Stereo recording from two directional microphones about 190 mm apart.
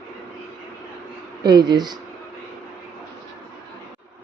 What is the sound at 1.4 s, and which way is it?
Speech, 20° right (ahead or behind).